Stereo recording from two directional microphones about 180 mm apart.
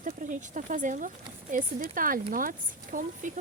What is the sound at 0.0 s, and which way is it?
Speech, 45° right (ahead or behind).